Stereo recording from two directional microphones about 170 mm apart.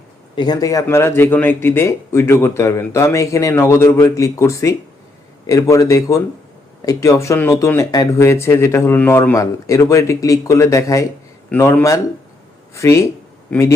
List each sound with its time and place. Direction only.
0.3 s speech: 25° left (ahead or behind)